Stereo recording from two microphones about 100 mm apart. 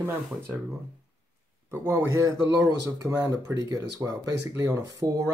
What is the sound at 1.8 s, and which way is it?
Speech, 35° right (ahead or behind).